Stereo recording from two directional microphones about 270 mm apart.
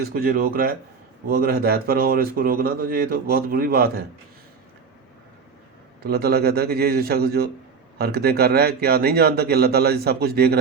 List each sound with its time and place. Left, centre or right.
0.0 s speech: right
6.0 s speech: right